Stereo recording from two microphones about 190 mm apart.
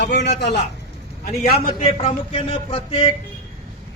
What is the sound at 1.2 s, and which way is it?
Speech, 50° left (ahead or behind).